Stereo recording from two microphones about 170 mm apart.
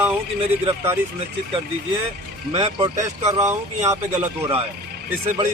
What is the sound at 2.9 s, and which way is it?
Speech, 20° right (ahead or behind).